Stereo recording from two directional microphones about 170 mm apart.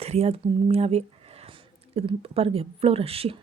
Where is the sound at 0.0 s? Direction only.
35° right (ahead or behind).